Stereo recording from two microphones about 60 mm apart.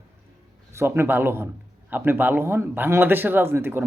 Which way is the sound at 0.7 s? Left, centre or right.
Right.